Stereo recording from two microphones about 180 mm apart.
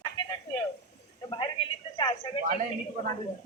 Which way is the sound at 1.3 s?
25° left (ahead or behind).